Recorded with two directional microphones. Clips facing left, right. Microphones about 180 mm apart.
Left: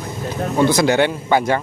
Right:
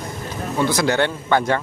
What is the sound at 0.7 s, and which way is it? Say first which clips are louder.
Speech: left 3 dB; 15° left (ahead or behind).